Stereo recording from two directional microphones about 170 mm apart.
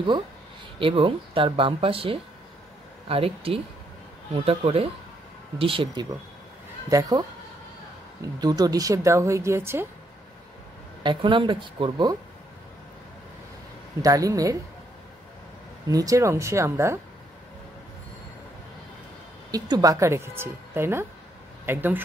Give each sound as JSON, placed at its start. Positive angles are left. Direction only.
{"t": 0.7, "sound": "speech", "side_deg": -30}
{"t": 6.9, "sound": "speech", "side_deg": -20}
{"t": 8.4, "sound": "speech", "side_deg": -20}
{"t": 11.0, "sound": "speech", "side_deg": -30}
{"t": 14.0, "sound": "speech", "side_deg": -20}
{"t": 15.9, "sound": "speech", "side_deg": -20}
{"t": 19.5, "sound": "speech", "side_deg": -20}